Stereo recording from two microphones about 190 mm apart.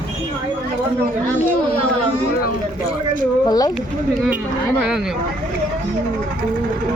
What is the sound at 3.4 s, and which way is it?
Speech, 20° left (ahead or behind).